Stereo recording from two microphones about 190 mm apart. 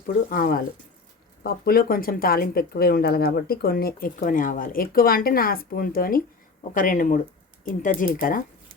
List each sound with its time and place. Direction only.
0.3 s speech: 45° left (ahead or behind)